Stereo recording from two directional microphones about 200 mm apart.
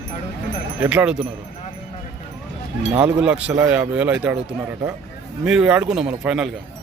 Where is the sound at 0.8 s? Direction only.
10° right (ahead or behind).